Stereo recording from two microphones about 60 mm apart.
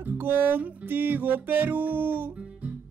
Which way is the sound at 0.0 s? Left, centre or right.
Right.